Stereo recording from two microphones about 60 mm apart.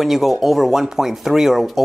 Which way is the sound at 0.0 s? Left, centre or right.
Centre.